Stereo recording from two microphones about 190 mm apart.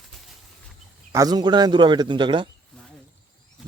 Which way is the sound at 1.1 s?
20° right (ahead or behind).